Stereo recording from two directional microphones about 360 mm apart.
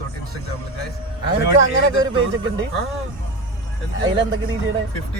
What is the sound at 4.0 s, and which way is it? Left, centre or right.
Speech, right.